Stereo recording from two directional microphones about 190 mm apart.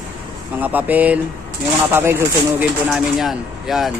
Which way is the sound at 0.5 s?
10° right (ahead or behind).